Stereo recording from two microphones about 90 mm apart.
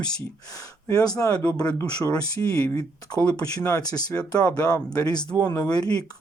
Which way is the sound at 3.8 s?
45° left (ahead or behind).